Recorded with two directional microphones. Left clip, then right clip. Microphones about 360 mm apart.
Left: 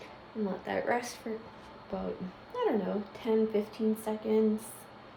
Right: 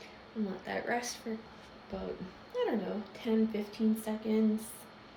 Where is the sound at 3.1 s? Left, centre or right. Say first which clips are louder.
Left 4 dB; centre.